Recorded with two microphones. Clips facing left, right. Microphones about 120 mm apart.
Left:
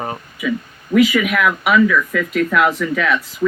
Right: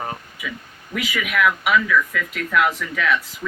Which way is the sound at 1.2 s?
40° left (ahead or behind).